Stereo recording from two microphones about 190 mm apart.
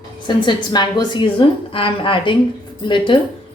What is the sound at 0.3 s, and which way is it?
A woman's voice, 25° left (ahead or behind).